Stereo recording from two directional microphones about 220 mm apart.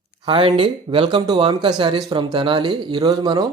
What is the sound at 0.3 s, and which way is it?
A man's voice, 25° right (ahead or behind).